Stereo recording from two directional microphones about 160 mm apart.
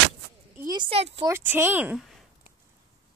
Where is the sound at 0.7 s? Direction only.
30° right (ahead or behind).